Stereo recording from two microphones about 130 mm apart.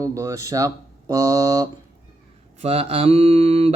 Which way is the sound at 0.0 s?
25° right (ahead or behind).